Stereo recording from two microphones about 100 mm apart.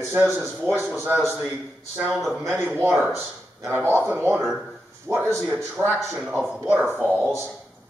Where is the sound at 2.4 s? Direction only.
20° right (ahead or behind).